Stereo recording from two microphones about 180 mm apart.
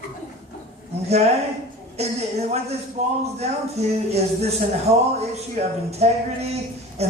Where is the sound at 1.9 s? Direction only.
35° right (ahead or behind).